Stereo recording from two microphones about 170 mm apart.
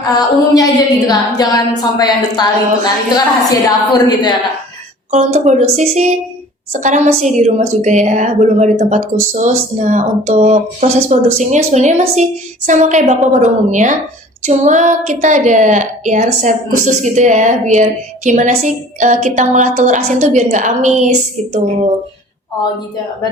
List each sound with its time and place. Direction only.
0.5 s a woman's voice: 20° left (ahead or behind)
5.1 s a woman's voice: 45° right (ahead or behind)